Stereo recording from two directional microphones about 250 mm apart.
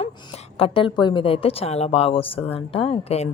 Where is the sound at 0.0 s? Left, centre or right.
Left.